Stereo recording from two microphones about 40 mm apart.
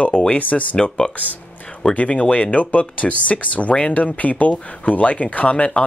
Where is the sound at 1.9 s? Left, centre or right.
Left.